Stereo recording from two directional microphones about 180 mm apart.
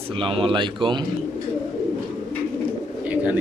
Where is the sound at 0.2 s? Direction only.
30° right (ahead or behind).